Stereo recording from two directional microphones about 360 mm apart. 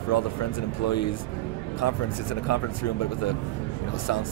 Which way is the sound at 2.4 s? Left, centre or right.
Left.